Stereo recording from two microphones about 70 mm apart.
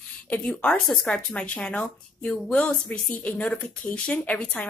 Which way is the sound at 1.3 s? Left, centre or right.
Centre.